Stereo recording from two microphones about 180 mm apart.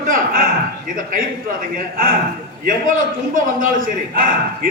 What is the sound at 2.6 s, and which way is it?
A man's voice, 50° right (ahead or behind).